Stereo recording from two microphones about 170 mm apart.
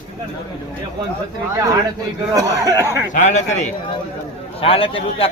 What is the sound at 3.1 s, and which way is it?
Speech, 45° left (ahead or behind).